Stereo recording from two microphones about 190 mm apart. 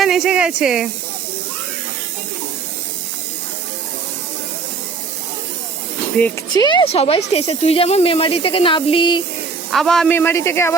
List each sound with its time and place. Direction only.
0.0 s speech: centre (ahead or behind)
6.1 s speech: 10° left (ahead or behind)
6.5 s speech: 25° left (ahead or behind)
9.6 s speech: centre (ahead or behind)